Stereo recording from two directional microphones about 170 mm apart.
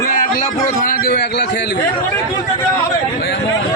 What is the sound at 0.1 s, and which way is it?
A man's voice, 50° left (ahead or behind).